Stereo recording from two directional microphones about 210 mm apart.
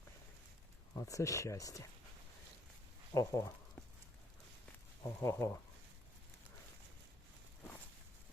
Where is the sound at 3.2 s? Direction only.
15° left (ahead or behind).